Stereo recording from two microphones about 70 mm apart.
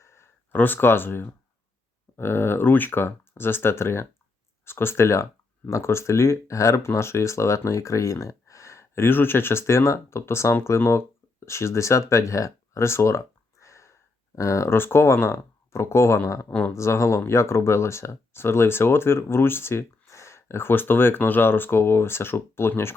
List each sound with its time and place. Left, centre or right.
0.0 s a sound: left
0.6 s speech: left
16.5 s speech: centre
16.7 s speech: left